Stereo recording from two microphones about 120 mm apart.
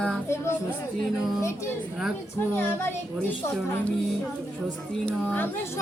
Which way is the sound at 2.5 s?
15° left (ahead or behind).